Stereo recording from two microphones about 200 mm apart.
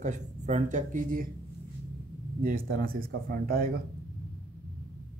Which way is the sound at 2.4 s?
45° right (ahead or behind).